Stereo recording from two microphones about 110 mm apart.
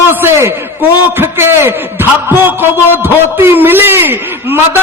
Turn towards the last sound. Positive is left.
turn(degrees=-20)  # may be behind; listen again after turning